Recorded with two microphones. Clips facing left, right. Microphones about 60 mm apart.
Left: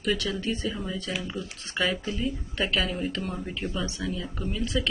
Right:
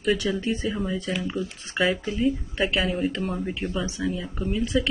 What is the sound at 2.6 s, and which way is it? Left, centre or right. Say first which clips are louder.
Speech: right 4 dB; centre.